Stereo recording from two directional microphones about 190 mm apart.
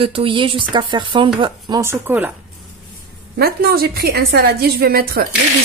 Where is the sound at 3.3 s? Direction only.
55° right (ahead or behind).